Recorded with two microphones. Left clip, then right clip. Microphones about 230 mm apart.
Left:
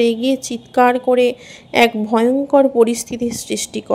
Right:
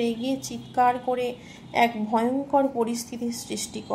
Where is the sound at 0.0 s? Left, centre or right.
Left.